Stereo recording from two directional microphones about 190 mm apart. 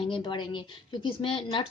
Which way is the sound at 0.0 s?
25° left (ahead or behind).